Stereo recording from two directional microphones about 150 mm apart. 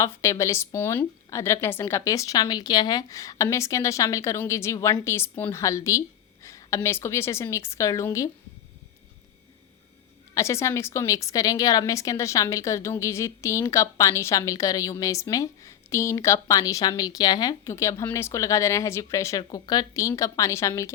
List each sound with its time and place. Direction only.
0.0 s a woman's voice: 20° left (ahead or behind)
10.3 s a woman's voice: 20° left (ahead or behind)